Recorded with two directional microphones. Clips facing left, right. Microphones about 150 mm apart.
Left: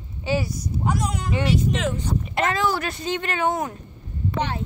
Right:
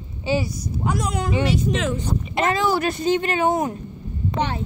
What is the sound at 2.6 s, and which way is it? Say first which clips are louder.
Speech: right 3 dB; 10° right (ahead or behind).